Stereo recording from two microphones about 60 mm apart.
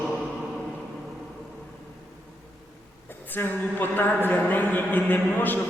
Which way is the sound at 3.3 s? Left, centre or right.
Left.